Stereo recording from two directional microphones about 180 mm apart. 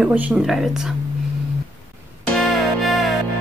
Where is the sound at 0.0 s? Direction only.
5° right (ahead or behind).